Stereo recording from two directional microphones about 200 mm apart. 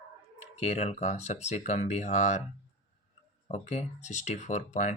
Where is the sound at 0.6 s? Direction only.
35° left (ahead or behind).